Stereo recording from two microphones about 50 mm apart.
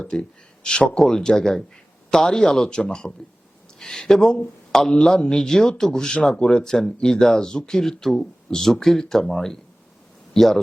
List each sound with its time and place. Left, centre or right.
0.1 s speech: centre